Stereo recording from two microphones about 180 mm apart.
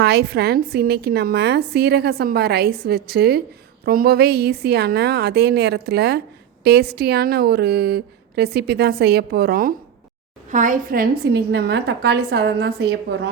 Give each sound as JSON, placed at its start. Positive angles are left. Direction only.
{"t": 0.0, "sound": "a woman's voice", "side_deg": -65}